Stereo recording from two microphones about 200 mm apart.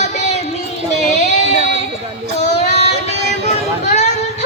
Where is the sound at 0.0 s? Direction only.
35° left (ahead or behind).